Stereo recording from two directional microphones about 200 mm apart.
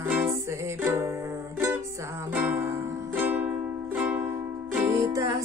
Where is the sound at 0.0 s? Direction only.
10° right (ahead or behind).